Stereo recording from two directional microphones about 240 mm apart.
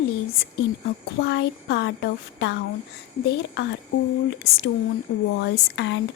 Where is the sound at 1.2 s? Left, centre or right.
Left.